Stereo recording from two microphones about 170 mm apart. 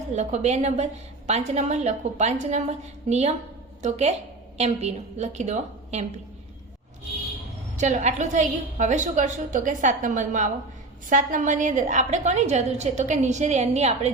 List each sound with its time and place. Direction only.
0.1 s a woman's voice: 40° right (ahead or behind)
7.8 s a woman's voice: 45° right (ahead or behind)